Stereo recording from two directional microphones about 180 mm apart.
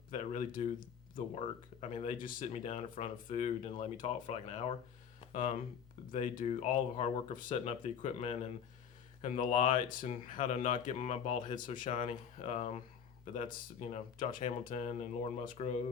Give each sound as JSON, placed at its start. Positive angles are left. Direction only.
{"t": 0.1, "sound": "speech", "side_deg": 45}